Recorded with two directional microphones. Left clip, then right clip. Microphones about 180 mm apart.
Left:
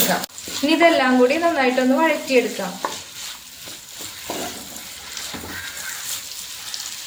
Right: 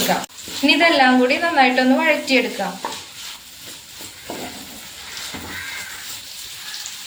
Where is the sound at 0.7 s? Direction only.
45° left (ahead or behind).